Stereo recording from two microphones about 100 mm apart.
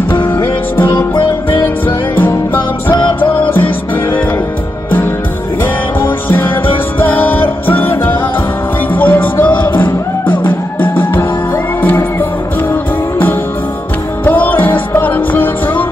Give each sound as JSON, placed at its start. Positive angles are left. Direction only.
{"t": 0.4, "sound": "music", "side_deg": 20}
{"t": 2.9, "sound": "music", "side_deg": 50}
{"t": 3.2, "sound": "music", "side_deg": 20}
{"t": 5.9, "sound": "music", "side_deg": 20}
{"t": 14.2, "sound": "music", "side_deg": 20}